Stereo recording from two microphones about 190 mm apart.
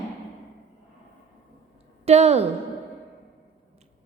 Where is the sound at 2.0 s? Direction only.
35° right (ahead or behind).